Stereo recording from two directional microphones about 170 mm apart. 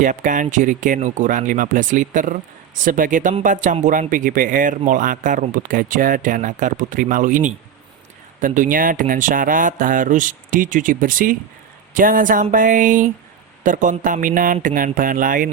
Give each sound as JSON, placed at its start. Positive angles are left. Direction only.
{"t": 0.0, "sound": "speech", "side_deg": -50}